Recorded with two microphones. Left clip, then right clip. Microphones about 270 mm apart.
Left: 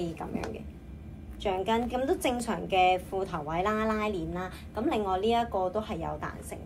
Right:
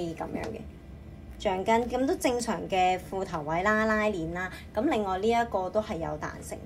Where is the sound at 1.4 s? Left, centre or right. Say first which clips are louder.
Right 3 dB; right.